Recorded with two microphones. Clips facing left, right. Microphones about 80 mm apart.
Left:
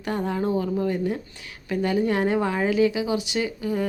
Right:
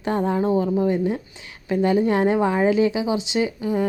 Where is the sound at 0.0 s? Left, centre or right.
Right.